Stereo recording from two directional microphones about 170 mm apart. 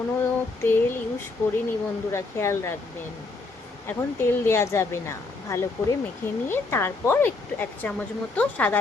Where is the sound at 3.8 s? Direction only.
15° left (ahead or behind).